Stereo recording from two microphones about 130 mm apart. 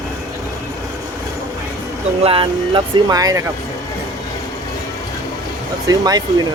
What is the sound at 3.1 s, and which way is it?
Speech, 25° right (ahead or behind).